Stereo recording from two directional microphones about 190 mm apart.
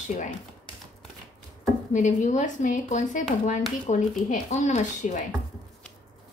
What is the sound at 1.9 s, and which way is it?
A woman's voice, 40° left (ahead or behind).